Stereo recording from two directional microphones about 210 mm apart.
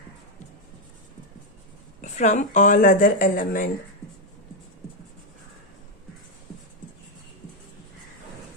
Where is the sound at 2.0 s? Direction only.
35° left (ahead or behind).